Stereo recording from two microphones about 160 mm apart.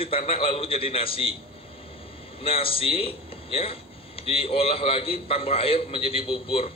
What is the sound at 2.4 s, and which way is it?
A man's voice, 35° left (ahead or behind).